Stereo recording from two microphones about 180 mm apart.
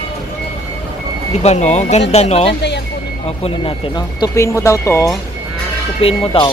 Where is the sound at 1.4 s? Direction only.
40° left (ahead or behind); by 5.1 s 15° left (ahead or behind).